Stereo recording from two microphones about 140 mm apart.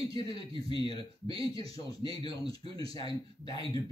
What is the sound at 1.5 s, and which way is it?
A man's voice, 25° left (ahead or behind).